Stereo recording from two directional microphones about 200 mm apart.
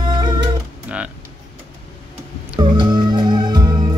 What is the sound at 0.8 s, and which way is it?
Music, 5° right (ahead or behind).